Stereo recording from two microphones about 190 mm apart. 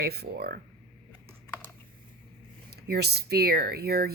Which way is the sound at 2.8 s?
55° right (ahead or behind).